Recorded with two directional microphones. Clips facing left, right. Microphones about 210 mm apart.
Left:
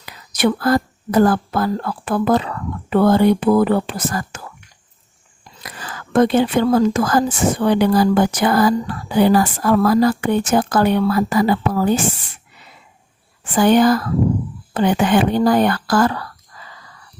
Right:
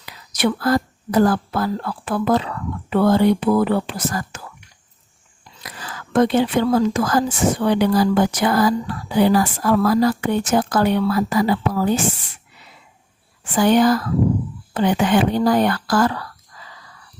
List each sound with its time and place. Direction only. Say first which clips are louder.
0.0 s speech: left 3 dB; 50° left (ahead or behind)
5.6 s speech: left 2 dB; 50° left (ahead or behind)
13.6 s speech: left 2 dB; 55° left (ahead or behind)